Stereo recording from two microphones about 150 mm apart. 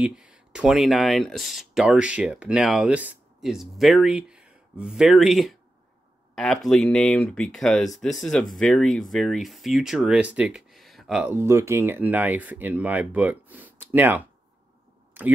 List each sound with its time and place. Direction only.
0.0 s speech: 5° right (ahead or behind)
11.2 s speech: 15° right (ahead or behind)